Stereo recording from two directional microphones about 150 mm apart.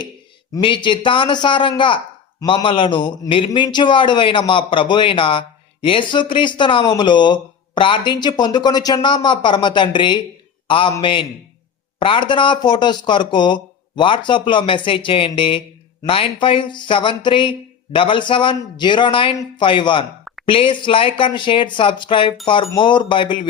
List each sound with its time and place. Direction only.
0.5 s a man's voice: 35° left (ahead or behind)